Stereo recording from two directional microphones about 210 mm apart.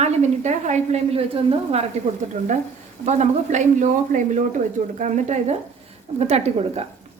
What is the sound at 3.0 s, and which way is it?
Speech, 35° right (ahead or behind).